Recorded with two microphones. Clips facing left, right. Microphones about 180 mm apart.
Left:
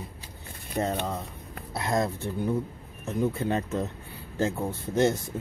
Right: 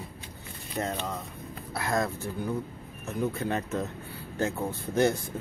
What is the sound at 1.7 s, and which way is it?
Speech, 20° left (ahead or behind).